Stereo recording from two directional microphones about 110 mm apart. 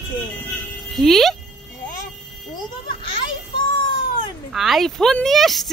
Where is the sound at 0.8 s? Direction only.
Centre (ahead or behind).